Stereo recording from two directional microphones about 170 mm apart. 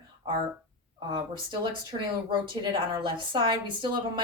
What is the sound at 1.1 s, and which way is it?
Speech, 30° right (ahead or behind).